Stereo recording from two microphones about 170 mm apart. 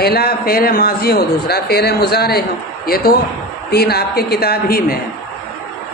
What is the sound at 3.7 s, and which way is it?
A man's voice, 70° left (ahead or behind).